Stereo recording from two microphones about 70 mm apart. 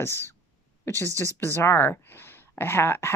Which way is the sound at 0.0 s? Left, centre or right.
Left.